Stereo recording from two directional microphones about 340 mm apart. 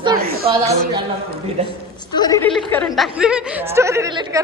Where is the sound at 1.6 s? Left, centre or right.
Centre.